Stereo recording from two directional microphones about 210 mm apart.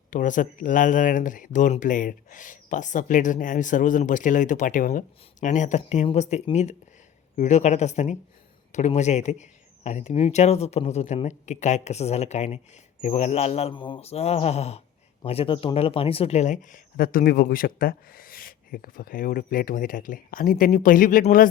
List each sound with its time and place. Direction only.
0.1 s speech: 35° left (ahead or behind)